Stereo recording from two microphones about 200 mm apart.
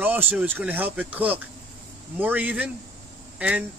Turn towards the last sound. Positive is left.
turn(degrees=-5)  # may be behind; listen again after turning